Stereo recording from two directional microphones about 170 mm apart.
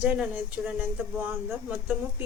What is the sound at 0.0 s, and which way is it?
Speech, 10° right (ahead or behind).